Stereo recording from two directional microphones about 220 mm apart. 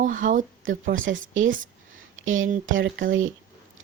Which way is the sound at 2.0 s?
65° right (ahead or behind).